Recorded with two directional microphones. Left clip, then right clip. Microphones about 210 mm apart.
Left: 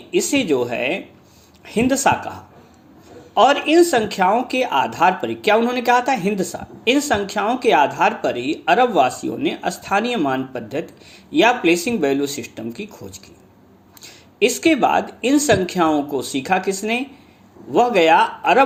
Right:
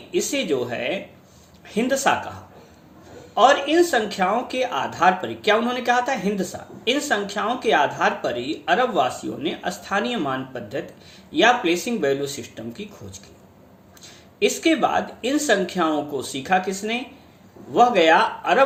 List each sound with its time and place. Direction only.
0.1 s speech: 35° left (ahead or behind)